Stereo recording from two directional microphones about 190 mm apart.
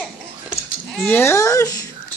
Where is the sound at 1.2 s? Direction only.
15° left (ahead or behind).